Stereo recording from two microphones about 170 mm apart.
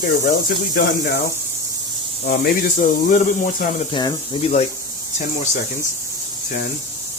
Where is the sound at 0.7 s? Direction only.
80° left.